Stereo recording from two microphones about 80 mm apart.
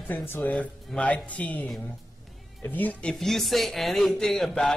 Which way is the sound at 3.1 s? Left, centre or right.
Centre.